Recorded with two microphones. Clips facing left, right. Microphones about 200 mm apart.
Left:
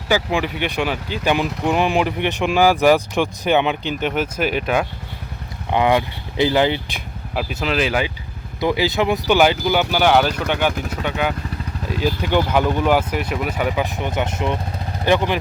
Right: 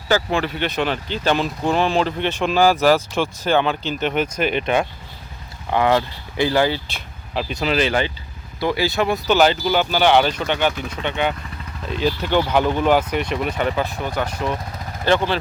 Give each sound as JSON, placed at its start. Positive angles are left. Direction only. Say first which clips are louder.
{"t": 0.1, "sound": "speech", "louder": "even", "side_deg": 15}
{"t": 4.1, "sound": "speech", "louder": "right 1 dB", "side_deg": 5}
{"t": 5.7, "sound": "speech", "louder": "left 1 dB", "side_deg": 15}
{"t": 8.6, "sound": "speech", "louder": "left 1 dB", "side_deg": 15}